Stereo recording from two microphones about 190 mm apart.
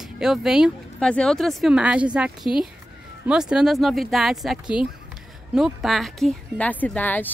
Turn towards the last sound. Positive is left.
turn(degrees=10)  # may be behind; listen again after turning